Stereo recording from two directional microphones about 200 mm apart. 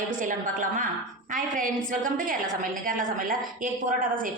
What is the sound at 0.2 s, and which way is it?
A woman's voice, 40° right (ahead or behind).